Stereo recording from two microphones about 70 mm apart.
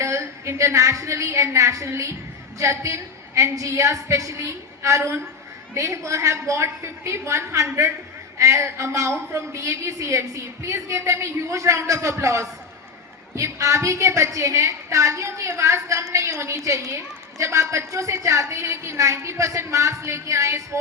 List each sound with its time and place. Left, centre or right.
0.0 s a woman's voice: right